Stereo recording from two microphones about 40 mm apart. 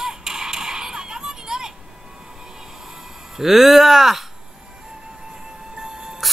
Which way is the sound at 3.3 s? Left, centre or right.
Centre.